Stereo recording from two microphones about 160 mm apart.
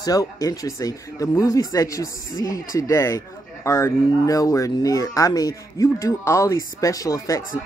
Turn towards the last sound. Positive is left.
turn(degrees=20)  # may be behind; listen again after turning